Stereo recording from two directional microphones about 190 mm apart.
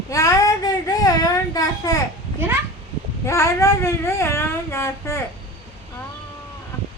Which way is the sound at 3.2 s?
15° left (ahead or behind).